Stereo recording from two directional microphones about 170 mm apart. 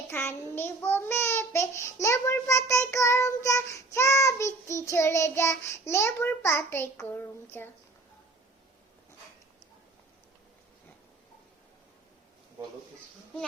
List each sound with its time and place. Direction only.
0.1 s child singing: 15° left (ahead or behind)
7.6 s a woman's voice: 15° left (ahead or behind)